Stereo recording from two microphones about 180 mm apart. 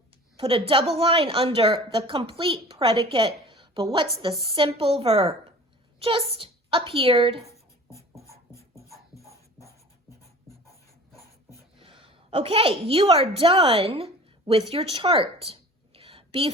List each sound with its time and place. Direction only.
0.3 s a woman's voice: 30° right (ahead or behind)
8.3 s music: 15° left (ahead or behind)
11.8 s a woman's voice: 30° right (ahead or behind)
14.7 s a sound: 30° right (ahead or behind)